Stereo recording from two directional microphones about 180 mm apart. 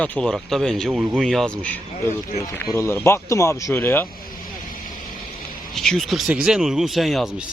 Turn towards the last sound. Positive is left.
turn(degrees=0)  # may be behind; listen again after turning